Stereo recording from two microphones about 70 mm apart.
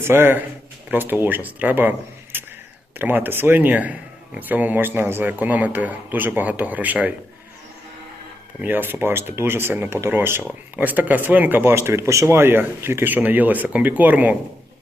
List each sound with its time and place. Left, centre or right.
0.0 s speech: right
2.3 s a sound: right
3.0 s speech: right
8.6 s speech: right